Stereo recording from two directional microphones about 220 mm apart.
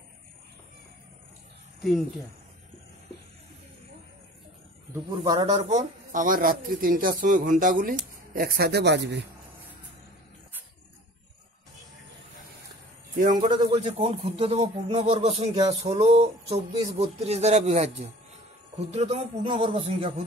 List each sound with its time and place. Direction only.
1.8 s speech: centre (ahead or behind)
5.4 s a man's voice: 25° right (ahead or behind); by 9.2 s 50° right (ahead or behind)
13.3 s speech: 20° right (ahead or behind)